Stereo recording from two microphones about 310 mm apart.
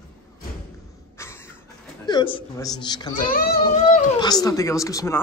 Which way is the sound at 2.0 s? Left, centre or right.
Centre.